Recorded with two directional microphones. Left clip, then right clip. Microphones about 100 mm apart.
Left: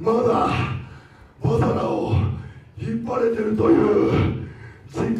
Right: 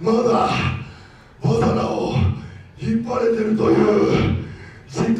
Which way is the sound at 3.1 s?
20° right (ahead or behind).